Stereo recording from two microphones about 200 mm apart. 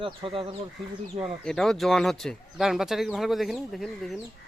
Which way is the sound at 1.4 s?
Centre (ahead or behind).